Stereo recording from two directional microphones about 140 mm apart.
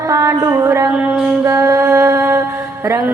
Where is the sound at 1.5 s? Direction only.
20° right (ahead or behind).